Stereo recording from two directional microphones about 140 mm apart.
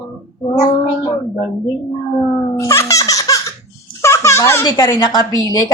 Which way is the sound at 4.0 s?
20° left (ahead or behind).